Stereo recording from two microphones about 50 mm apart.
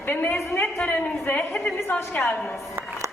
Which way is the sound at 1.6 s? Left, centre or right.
Left.